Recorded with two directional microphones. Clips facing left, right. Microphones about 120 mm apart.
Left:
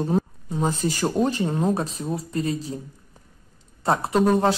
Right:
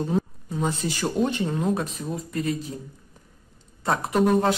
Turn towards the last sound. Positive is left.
turn(degrees=30)  # may be behind; listen again after turning